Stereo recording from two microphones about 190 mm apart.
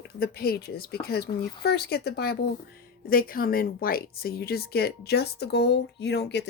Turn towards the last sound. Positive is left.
turn(degrees=60)  # may be behind; listen again after turning